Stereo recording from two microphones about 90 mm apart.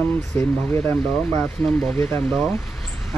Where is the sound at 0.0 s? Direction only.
25° left (ahead or behind).